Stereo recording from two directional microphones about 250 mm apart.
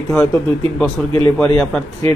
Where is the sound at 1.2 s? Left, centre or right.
Centre.